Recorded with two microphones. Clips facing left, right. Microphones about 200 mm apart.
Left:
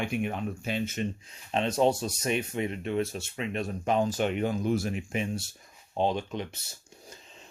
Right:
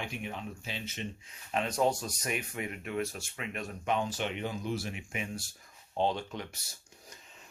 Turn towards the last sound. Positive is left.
turn(degrees=20)  # may be behind; listen again after turning